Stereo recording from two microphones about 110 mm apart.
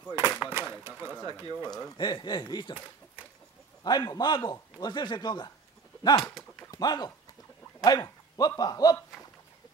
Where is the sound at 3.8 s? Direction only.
40° left (ahead or behind).